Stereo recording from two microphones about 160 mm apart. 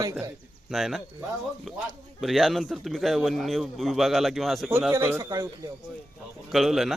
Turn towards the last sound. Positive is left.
turn(degrees=0)  # may be behind; listen again after turning